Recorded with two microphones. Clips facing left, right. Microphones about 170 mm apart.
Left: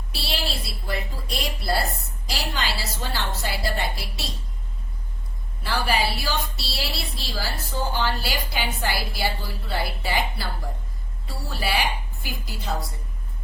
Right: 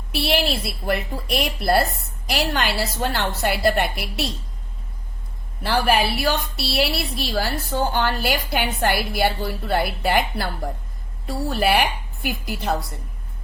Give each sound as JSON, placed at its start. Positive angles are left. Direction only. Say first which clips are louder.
{"t": 0.1, "sound": "a woman's voice", "louder": "right 9 dB", "side_deg": -55}
{"t": 5.6, "sound": "a woman's voice", "louder": "right 5 dB", "side_deg": -60}